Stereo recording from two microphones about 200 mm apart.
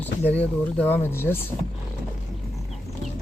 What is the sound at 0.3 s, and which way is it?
Speech, 10° left (ahead or behind).